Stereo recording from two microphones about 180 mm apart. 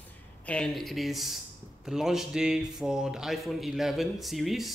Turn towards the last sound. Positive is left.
turn(degrees=0)  # may be behind; listen again after turning